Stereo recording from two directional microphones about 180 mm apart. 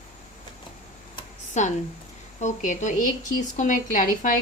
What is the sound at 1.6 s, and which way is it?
Speech, 40° left (ahead or behind).